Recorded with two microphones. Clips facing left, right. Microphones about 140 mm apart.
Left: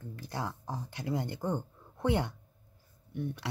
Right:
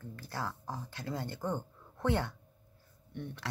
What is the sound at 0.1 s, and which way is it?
Speech, 15° left (ahead or behind).